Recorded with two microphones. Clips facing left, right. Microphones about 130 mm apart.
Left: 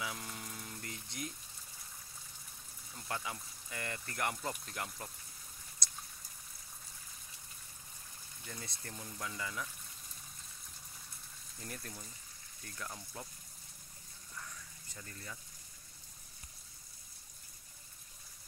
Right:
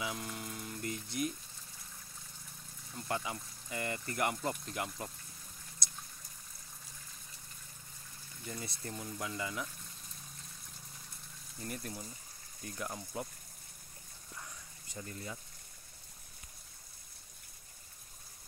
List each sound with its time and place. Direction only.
0.0 s a sound: 5° right (ahead or behind)
3.1 s speech: 5° right (ahead or behind)
8.5 s speech: 10° right (ahead or behind)
11.6 s speech: 5° right (ahead or behind)
12.6 s speech: 20° right (ahead or behind)
14.3 s a sound: 25° right (ahead or behind)